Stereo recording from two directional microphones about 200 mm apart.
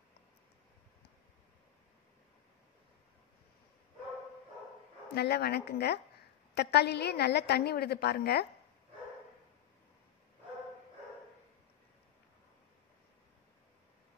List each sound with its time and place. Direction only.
5.1 s a woman's voice: 55° left (ahead or behind)